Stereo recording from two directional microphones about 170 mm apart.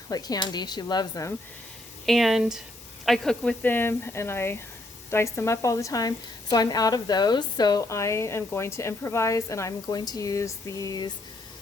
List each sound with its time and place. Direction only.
0.1 s a woman's voice: 20° left (ahead or behind)
2.0 s a woman's voice: centre (ahead or behind); by 11.1 s 20° left (ahead or behind)